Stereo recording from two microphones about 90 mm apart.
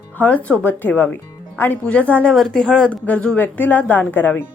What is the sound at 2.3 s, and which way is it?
Speech, 5° left (ahead or behind).